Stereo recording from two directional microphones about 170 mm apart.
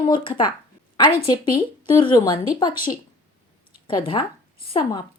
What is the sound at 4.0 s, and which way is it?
Speech, 25° left (ahead or behind).